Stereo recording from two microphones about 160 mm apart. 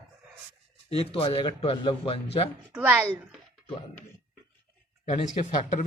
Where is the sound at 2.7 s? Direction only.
10° right (ahead or behind).